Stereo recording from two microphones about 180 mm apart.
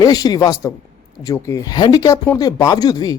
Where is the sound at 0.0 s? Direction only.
20° left (ahead or behind).